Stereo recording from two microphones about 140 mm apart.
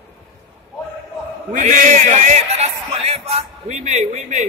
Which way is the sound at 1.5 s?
65° right (ahead or behind).